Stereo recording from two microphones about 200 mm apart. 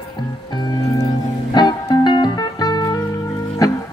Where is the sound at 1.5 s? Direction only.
20° left (ahead or behind).